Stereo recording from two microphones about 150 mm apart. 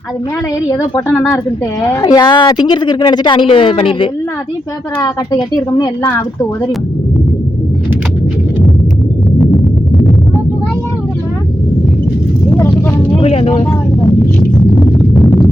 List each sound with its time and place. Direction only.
1.1 s speech: 15° left (ahead or behind)
1.9 s a woman's voice: 25° left (ahead or behind)
12.7 s vehicle: 40° left (ahead or behind)
14.8 s a sound: 25° left (ahead or behind)